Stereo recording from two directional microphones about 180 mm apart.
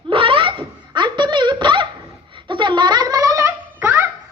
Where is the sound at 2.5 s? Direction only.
25° right (ahead or behind).